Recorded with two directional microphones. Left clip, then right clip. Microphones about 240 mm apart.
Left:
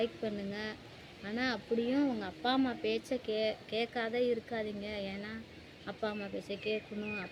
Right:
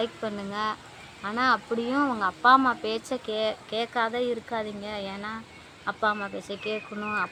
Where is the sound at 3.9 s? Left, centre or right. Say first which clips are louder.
Right 7 dB; right.